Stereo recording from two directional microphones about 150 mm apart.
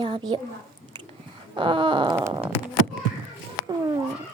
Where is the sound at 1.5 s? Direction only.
35° right (ahead or behind).